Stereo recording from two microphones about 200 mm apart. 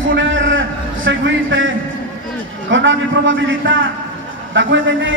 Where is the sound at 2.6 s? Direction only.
70° right (ahead or behind).